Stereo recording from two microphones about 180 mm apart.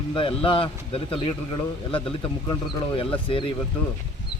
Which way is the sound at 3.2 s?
30° left (ahead or behind).